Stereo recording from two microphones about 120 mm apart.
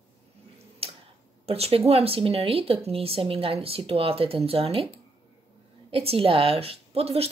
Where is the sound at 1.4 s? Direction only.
55° right (ahead or behind).